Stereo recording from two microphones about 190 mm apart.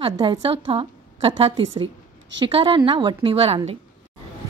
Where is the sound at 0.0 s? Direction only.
25° right (ahead or behind).